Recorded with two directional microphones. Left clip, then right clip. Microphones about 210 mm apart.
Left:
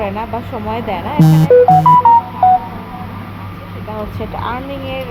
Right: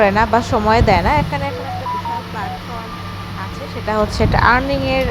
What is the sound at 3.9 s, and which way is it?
Speech, 30° right (ahead or behind).